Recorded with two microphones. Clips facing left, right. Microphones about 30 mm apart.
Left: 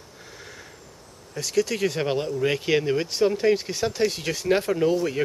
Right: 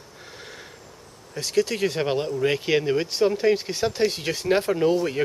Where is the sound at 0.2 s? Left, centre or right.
Right.